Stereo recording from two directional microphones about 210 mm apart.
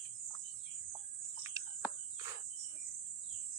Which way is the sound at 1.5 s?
15° right (ahead or behind).